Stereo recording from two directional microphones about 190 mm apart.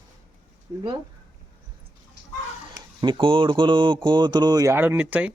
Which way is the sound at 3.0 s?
25° right (ahead or behind).